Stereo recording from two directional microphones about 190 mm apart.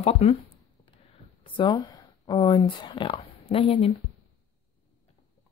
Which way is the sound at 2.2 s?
25° left (ahead or behind).